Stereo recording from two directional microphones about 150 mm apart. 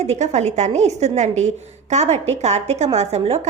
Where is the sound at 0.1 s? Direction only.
45° right (ahead or behind).